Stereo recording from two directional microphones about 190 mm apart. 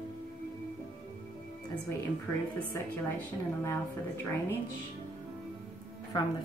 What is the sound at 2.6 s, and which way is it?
Speech, 10° left (ahead or behind).